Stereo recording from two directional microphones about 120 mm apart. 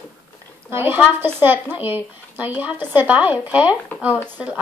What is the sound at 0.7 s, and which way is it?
Speech, 20° right (ahead or behind).